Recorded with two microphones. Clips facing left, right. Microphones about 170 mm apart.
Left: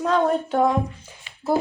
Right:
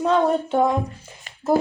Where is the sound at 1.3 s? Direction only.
45° right (ahead or behind).